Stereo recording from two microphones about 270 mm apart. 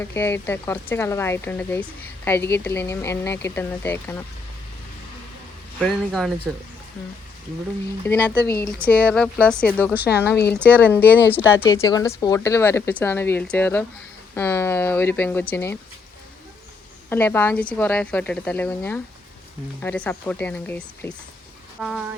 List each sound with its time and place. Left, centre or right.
0.0 s speech: centre
5.8 s a woman's voice: centre
8.0 s a woman's voice: centre
10.3 s speech: left
10.6 s speech: centre
17.1 s a woman's voice: centre